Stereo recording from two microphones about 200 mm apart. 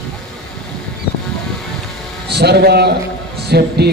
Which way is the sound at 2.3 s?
55° right (ahead or behind).